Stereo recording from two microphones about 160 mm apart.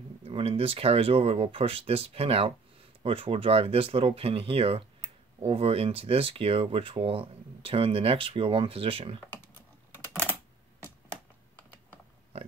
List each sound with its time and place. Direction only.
0.2 s speech: 40° right (ahead or behind)